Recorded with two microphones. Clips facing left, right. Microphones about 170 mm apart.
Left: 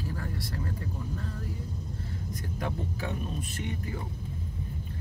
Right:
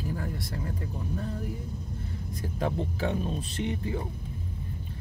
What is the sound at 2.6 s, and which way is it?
Speech, 25° right (ahead or behind).